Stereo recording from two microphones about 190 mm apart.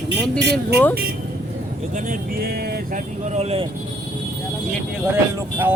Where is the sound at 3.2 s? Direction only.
35° right (ahead or behind).